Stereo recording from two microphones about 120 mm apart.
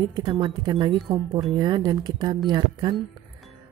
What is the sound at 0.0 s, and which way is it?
A woman's voice, 40° right (ahead or behind).